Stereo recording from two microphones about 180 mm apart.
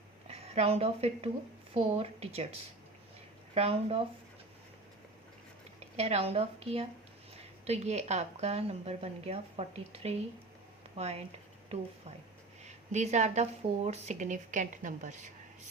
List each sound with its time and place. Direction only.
0.3 s a woman's voice: 35° right (ahead or behind)
3.5 s speech: 35° right (ahead or behind)
5.8 s speech: 35° right (ahead or behind)